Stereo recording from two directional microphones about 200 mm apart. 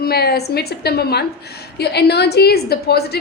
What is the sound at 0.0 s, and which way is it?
A woman's voice, 50° left (ahead or behind).